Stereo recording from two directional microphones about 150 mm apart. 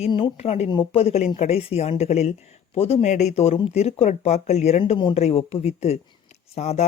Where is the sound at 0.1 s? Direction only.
40° left (ahead or behind).